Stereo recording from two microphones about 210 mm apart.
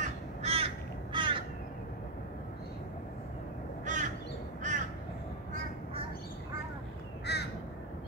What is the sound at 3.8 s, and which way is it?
Crow, 35° right (ahead or behind).